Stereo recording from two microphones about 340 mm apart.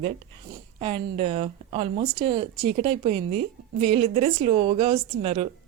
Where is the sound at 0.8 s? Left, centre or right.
Centre.